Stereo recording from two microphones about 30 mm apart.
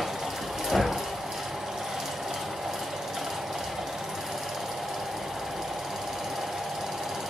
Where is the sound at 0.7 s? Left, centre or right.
Centre.